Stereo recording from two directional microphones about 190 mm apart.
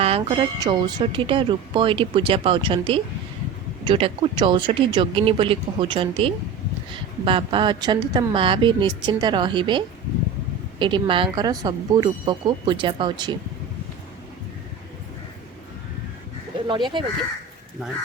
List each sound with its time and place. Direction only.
0.0 s speech: 30° right (ahead or behind)
16.6 s speech: 25° right (ahead or behind)